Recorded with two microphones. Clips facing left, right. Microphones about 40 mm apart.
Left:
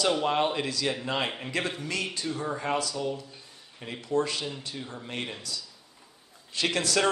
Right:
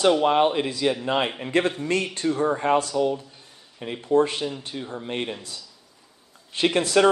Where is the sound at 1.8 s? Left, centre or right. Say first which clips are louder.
Right 7 dB; right.